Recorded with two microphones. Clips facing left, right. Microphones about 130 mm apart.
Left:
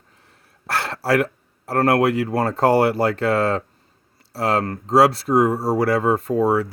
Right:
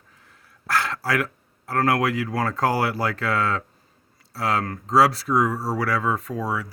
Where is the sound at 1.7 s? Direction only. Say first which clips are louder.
Left 4 dB; 60° left (ahead or behind).